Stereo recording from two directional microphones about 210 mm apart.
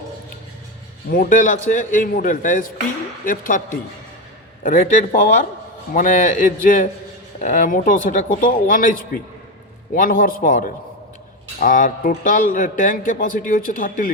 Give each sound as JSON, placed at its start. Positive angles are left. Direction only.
{"t": 1.1, "sound": "a man's voice", "side_deg": 40}